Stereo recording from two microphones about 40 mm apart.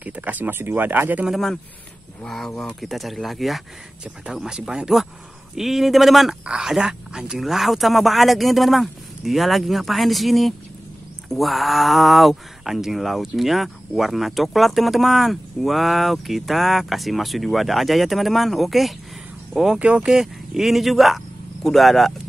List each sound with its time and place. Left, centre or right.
0.0 s a sound: right
0.6 s speech: right
2.2 s speech: centre; by 4.8 s right
5.6 s speech: centre
6.4 s speech: right
7.4 s speech: centre
19.8 s speech: right
20.1 s speech: centre